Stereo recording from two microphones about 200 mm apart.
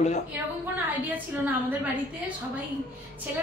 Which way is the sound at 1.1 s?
10° right (ahead or behind).